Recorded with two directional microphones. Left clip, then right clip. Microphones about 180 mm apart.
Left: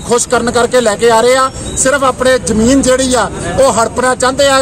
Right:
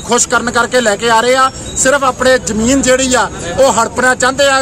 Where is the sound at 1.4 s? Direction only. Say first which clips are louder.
Right 1 dB; 30° right (ahead or behind).